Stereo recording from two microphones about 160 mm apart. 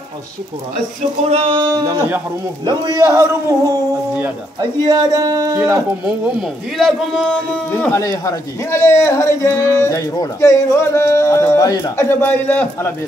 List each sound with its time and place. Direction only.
1.3 s a man's voice: 35° right (ahead or behind)
6.0 s a man's voice: centre (ahead or behind)
7.7 s speech: 15° left (ahead or behind)